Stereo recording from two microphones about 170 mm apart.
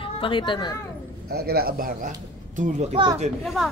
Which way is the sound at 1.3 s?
65° right (ahead or behind).